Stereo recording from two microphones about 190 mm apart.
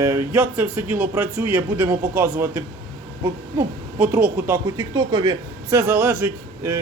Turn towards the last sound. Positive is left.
turn(degrees=-10)  # may be behind; listen again after turning